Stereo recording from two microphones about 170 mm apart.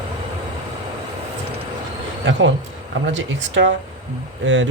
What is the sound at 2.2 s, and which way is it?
Speech, 90° right.